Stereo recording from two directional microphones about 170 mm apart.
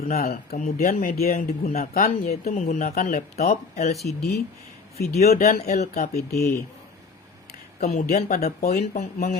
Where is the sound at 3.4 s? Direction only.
40° left (ahead or behind).